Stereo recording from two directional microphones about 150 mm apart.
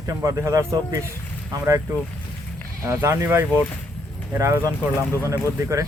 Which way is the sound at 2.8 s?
20° right (ahead or behind).